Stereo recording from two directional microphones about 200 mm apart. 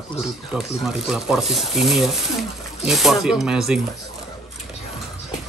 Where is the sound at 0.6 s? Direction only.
Centre (ahead or behind).